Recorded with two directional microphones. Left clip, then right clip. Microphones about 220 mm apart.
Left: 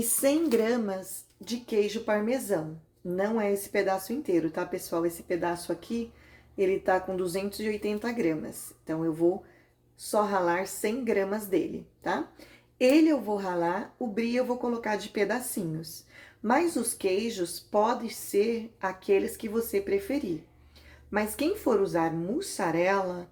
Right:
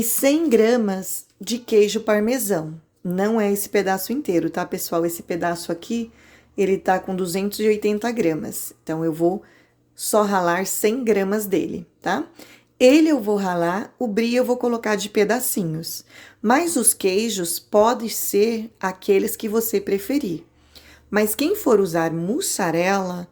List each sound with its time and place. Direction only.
0.0 s speech: 45° right (ahead or behind)